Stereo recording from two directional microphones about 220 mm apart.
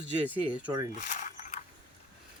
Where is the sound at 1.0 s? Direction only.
30° left (ahead or behind).